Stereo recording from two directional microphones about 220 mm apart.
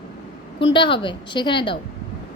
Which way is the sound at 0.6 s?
20° left (ahead or behind).